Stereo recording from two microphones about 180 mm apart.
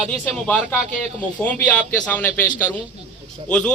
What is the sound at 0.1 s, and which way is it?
A man's voice, 5° left (ahead or behind).